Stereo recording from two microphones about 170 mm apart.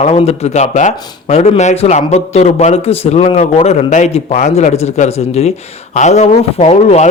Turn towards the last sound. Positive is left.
turn(degrees=40)  # may be behind; listen again after turning